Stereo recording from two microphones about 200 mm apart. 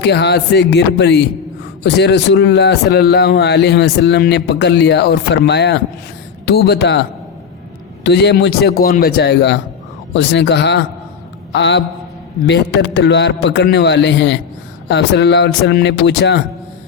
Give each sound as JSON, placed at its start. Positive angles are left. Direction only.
{"t": 0.0, "sound": "speech", "side_deg": 55}
{"t": 8.0, "sound": "speech", "side_deg": 55}